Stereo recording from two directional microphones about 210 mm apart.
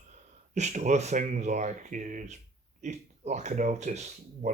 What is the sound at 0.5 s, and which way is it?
Speech, 35° right (ahead or behind).